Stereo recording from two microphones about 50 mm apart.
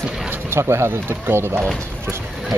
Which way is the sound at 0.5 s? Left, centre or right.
Right.